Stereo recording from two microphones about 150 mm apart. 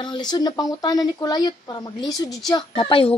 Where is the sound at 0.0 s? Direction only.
30° left (ahead or behind).